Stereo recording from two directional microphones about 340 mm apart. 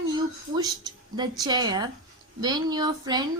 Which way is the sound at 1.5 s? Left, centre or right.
Centre.